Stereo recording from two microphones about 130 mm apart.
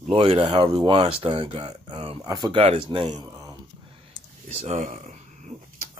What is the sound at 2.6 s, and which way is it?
Speech, 45° right (ahead or behind).